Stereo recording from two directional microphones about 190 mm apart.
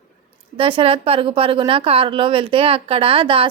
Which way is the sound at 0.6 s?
30° right (ahead or behind).